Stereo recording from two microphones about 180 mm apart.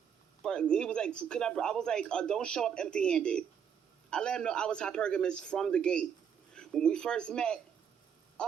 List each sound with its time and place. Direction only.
0.4 s speech: 5° left (ahead or behind)